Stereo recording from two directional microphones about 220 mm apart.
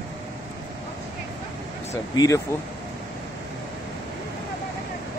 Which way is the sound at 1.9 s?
15° left (ahead or behind).